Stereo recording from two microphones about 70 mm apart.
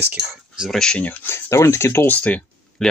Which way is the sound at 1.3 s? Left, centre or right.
Left.